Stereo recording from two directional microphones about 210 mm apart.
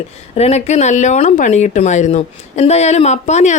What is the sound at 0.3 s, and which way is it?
A woman's voice, 30° left (ahead or behind).